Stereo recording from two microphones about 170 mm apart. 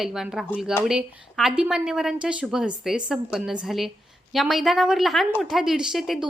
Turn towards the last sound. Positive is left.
turn(degrees=-5)  # may be behind; listen again after turning